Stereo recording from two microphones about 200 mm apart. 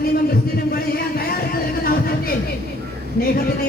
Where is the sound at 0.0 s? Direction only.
50° left (ahead or behind).